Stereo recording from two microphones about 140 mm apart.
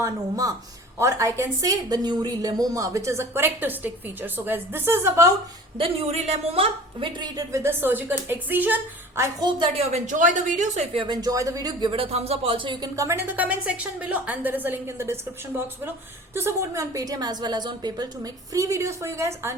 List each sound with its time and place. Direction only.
0.0 s a woman's voice: 25° right (ahead or behind)
5.7 s a woman's voice: 40° right (ahead or behind)
7.5 s a woman's voice: 15° right (ahead or behind)
9.4 s a woman's voice: 35° right (ahead or behind)
9.9 s a woman's voice: 65° right (ahead or behind)
10.9 s speech: 30° right (ahead or behind)